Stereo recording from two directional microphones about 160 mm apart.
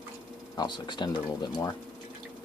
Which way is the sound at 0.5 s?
25° left (ahead or behind).